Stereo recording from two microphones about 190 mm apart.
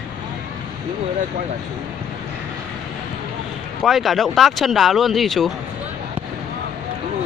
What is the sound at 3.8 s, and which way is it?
Speech, centre (ahead or behind).